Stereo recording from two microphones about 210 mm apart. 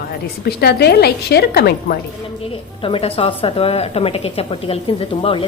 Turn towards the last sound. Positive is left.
turn(degrees=25)  # may be behind; listen again after turning